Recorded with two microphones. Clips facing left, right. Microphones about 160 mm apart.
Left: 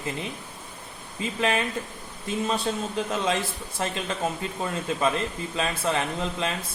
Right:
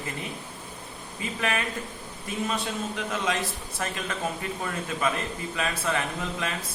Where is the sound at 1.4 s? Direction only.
25° left (ahead or behind).